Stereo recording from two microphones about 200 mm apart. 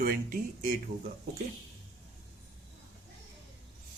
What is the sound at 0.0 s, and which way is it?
Speech, 45° right (ahead or behind).